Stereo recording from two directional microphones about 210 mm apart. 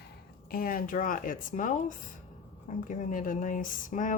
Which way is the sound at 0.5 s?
45° left (ahead or behind).